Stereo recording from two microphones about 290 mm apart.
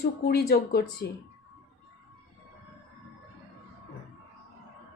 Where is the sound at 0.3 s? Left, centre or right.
Left.